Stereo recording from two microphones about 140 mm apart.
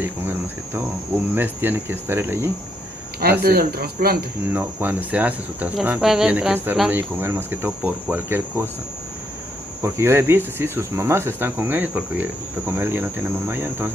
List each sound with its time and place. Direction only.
0.0 s speech: 15° right (ahead or behind)
3.2 s speech: 90° right
4.5 s speech: 10° right (ahead or behind)
9.8 s speech: 20° right (ahead or behind)